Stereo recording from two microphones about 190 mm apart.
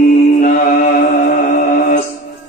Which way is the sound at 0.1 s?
45° left (ahead or behind).